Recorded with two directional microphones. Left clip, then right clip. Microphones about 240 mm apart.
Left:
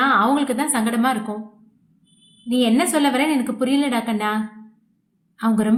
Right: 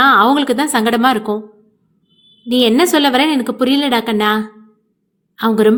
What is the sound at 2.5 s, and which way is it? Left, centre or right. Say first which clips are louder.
A woman's voice: right 7 dB; right.